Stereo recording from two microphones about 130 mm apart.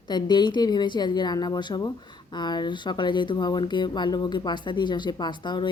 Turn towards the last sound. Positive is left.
turn(degrees=35)  # may be behind; listen again after turning